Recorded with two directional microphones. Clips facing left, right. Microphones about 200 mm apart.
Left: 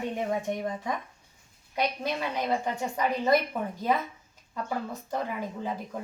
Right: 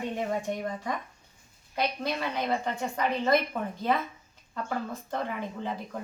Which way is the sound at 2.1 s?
10° left (ahead or behind).